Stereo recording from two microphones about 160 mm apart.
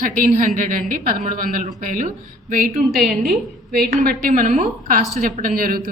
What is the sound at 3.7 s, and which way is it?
A woman's voice, 70° right (ahead or behind).